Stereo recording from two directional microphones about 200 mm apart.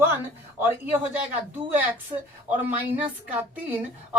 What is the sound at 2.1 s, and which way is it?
Speech, 25° right (ahead or behind).